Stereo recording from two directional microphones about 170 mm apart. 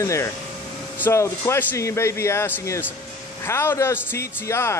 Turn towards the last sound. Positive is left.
turn(degrees=15)  # may be behind; listen again after turning